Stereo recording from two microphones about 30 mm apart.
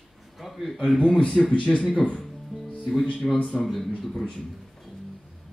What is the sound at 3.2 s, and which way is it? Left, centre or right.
Speech, centre.